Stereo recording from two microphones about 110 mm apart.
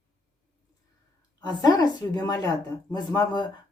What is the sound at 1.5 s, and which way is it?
Speech, 35° left (ahead or behind).